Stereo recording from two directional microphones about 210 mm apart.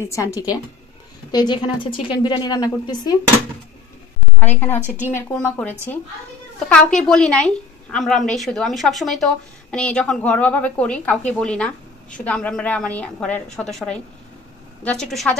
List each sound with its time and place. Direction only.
0.1 s a woman's voice: 15° left (ahead or behind)
4.4 s a woman's voice: 10° left (ahead or behind)